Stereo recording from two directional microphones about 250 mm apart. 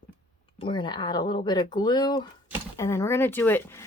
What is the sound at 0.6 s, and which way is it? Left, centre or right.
Speech, centre.